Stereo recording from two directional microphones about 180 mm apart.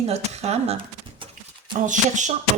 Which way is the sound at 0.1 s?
35° right (ahead or behind).